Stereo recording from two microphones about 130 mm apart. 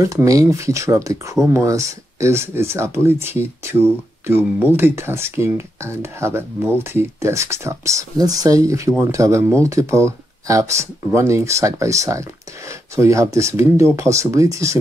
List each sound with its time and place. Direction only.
0.0 s speech: 25° right (ahead or behind)